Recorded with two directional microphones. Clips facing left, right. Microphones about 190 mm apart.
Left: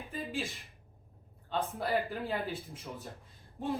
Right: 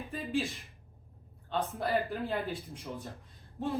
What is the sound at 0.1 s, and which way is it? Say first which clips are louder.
Speech: right 4 dB; centre (ahead or behind).